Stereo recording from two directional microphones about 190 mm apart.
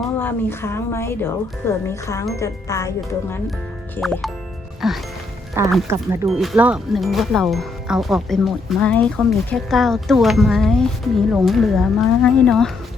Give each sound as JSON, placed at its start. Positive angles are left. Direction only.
{"t": 0.2, "sound": "a woman's voice", "side_deg": 10}
{"t": 4.0, "sound": "speech", "side_deg": 0}
{"t": 5.6, "sound": "speech", "side_deg": -15}
{"t": 6.2, "sound": "speech", "side_deg": 0}